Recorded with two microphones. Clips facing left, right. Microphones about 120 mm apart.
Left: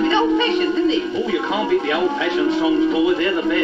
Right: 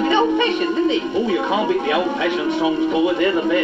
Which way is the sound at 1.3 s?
20° right (ahead or behind).